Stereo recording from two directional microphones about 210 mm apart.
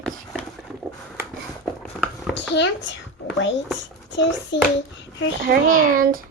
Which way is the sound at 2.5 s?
60° left (ahead or behind).